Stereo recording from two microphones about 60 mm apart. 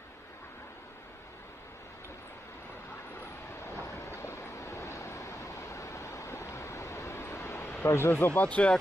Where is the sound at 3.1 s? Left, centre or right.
Left.